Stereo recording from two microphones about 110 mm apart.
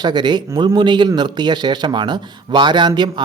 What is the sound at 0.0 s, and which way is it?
Speech, 40° right (ahead or behind).